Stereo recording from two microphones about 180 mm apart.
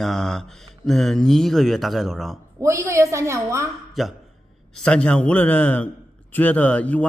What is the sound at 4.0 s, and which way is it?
A man's voice, centre (ahead or behind).